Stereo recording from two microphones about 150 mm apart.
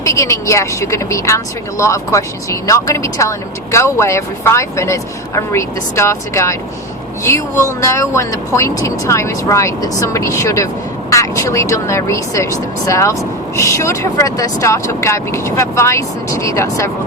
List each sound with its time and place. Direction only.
0.0 s speech: 20° left (ahead or behind)